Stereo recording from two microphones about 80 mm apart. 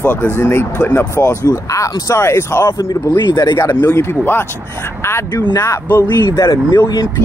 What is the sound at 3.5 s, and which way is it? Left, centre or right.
Speech, left.